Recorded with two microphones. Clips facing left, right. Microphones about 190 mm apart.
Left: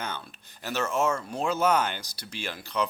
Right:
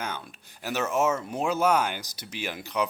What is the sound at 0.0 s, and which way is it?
Speech, 10° right (ahead or behind).